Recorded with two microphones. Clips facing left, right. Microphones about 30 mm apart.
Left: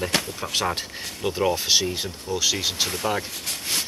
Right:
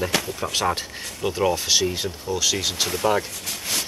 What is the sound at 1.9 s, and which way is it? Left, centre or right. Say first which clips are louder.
Speech: right 2 dB; centre.